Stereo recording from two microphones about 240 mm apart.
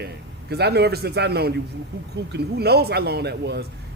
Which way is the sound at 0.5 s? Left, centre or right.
Right.